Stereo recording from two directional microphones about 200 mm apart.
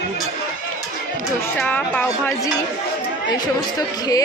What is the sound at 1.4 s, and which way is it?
Speech, 10° left (ahead or behind).